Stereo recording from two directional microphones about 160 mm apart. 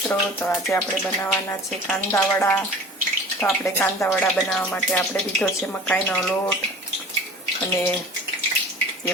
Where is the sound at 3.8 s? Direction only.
15° left (ahead or behind).